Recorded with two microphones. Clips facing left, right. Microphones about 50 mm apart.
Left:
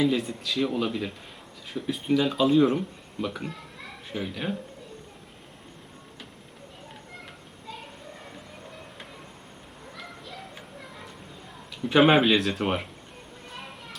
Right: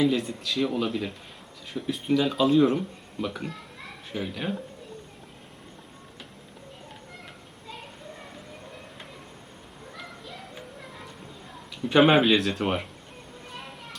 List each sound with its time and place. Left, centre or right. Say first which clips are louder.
0.0 s speech: right 1 dB; centre
10.0 s music: left 1 dB; centre
11.8 s speech: even; centre
13.5 s a sound: even; centre